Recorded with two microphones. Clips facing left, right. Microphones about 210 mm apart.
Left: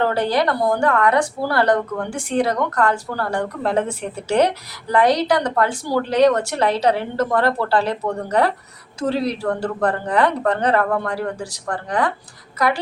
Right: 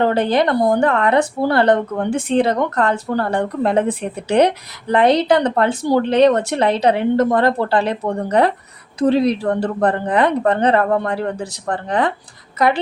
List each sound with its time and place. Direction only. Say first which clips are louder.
0.0 s a woman's voice: right 3 dB; 20° right (ahead or behind)